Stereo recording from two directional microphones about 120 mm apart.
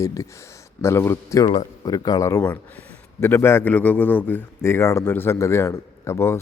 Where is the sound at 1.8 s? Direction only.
30° left (ahead or behind).